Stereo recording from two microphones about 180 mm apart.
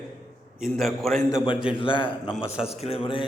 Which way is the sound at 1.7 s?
30° left (ahead or behind).